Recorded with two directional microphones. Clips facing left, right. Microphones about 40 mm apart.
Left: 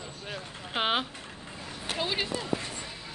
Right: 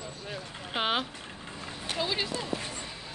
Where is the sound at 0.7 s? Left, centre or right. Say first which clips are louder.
Left 1 dB; centre.